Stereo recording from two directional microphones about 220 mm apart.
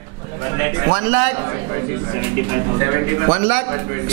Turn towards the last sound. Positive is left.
turn(degrees=-15)  # may be behind; listen again after turning